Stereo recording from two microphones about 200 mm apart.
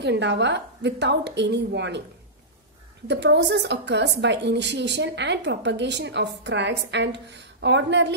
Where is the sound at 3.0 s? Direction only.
60° right (ahead or behind).